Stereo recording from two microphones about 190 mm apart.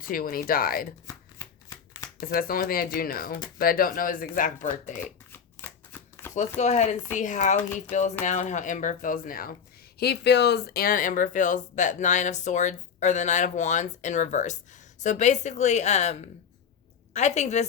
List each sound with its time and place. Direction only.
0.1 s speech: 50° left (ahead or behind)
2.2 s speech: 50° left (ahead or behind)
5.3 s shuffling cards: 10° left (ahead or behind)
6.3 s speech: 35° left (ahead or behind)
10.0 s speech: 60° left (ahead or behind); by 16.1 s 35° left (ahead or behind)
17.2 s speech: 35° left (ahead or behind)